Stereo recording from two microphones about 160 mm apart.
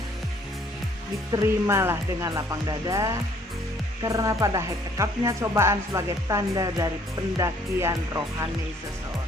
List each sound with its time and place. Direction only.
1.3 s speech: 15° right (ahead or behind)